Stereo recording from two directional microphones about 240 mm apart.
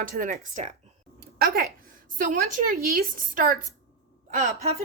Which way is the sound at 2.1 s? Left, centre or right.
Right.